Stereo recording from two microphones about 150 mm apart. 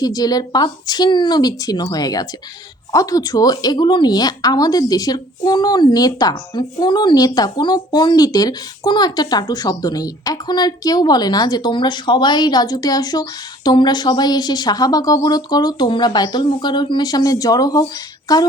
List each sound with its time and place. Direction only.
0.0 s a woman's voice: 25° left (ahead or behind)